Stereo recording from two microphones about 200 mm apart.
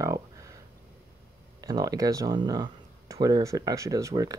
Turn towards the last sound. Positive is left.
turn(degrees=-15)  # may be behind; listen again after turning